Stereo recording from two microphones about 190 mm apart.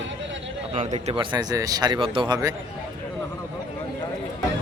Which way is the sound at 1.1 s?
25° right (ahead or behind).